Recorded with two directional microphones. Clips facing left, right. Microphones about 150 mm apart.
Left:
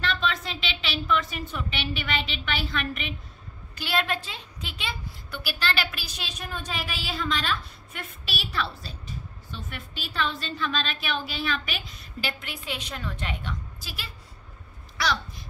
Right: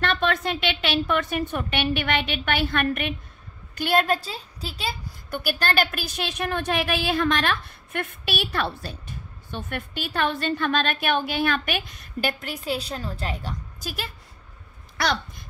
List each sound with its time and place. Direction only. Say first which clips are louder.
0.0 s a woman's voice: right 5 dB; 55° right (ahead or behind)